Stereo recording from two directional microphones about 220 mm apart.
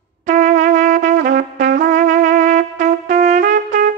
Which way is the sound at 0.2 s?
35° right (ahead or behind).